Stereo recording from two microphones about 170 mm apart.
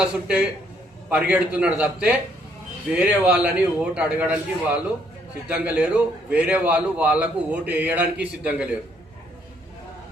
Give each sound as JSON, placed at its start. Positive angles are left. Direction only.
{"t": 0.0, "sound": "a man's voice", "side_deg": -5}
{"t": 7.6, "sound": "a man's voice", "side_deg": -75}
{"t": 7.9, "sound": "a man's voice", "side_deg": -10}